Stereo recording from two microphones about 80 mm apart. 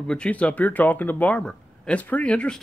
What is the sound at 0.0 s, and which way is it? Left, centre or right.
Speech, centre.